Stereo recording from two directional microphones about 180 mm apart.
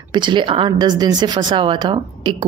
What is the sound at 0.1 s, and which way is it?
Speech, 25° right (ahead or behind).